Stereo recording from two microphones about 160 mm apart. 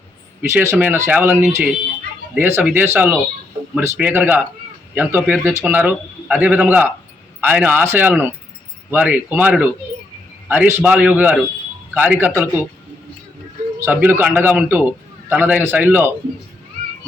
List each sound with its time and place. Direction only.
0.4 s a man's voice: 15° right (ahead or behind)
13.7 s a man's voice: 10° right (ahead or behind)